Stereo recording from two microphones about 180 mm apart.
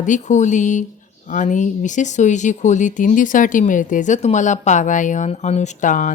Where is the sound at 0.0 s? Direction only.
45° left (ahead or behind).